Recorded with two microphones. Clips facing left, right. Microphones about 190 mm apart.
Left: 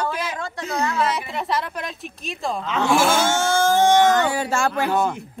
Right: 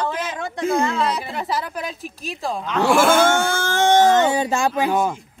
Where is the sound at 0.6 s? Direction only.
50° right (ahead or behind).